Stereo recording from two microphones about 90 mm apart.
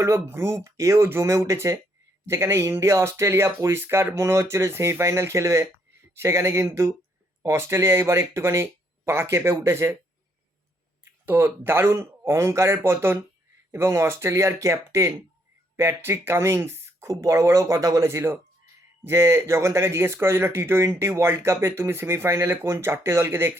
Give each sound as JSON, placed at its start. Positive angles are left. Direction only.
{"t": 0.0, "sound": "speech", "side_deg": -30}
{"t": 11.3, "sound": "speech", "side_deg": -25}